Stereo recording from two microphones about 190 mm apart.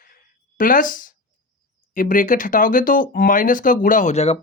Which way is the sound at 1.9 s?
45° left (ahead or behind).